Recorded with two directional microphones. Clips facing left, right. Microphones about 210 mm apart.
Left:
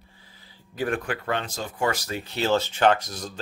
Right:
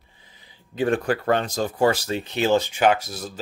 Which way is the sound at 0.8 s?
30° right (ahead or behind).